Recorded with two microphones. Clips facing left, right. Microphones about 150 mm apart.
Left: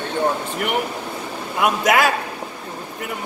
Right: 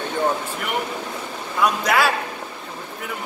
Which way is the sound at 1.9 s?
45° left (ahead or behind).